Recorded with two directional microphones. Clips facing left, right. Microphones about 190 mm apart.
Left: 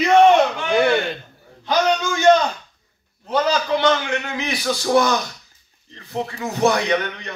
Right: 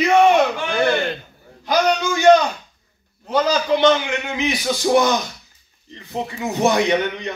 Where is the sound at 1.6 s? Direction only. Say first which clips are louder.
Right 1 dB; 10° right (ahead or behind).